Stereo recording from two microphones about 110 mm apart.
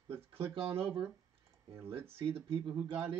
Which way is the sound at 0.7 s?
60° right (ahead or behind).